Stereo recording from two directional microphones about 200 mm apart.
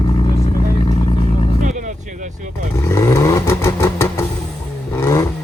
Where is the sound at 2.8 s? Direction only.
15° left (ahead or behind).